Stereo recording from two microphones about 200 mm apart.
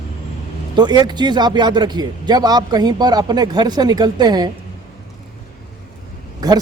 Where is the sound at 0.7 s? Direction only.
20° right (ahead or behind).